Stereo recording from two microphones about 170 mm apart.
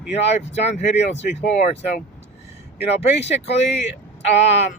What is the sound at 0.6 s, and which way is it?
Speech, 40° left (ahead or behind).